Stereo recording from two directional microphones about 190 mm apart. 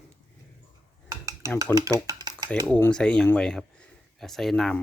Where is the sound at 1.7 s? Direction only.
15° right (ahead or behind).